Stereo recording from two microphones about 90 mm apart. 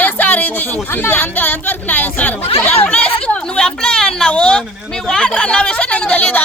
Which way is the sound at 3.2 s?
10° left (ahead or behind).